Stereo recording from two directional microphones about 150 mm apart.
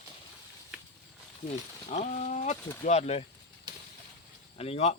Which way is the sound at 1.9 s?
50° left (ahead or behind).